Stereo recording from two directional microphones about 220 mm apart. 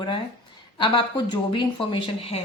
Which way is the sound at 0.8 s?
20° left (ahead or behind).